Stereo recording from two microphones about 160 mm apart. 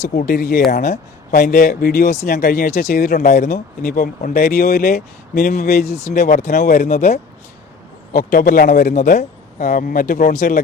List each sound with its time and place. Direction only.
0.2 s speech: 55° left (ahead or behind)
3.2 s speech: 50° left (ahead or behind); by 5.5 s 70° left (ahead or behind)
5.5 s speech: 55° left (ahead or behind)
8.1 s speech: 60° left (ahead or behind)